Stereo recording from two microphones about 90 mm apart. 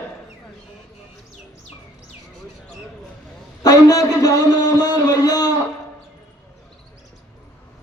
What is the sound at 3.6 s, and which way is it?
A man's voice, 45° left (ahead or behind).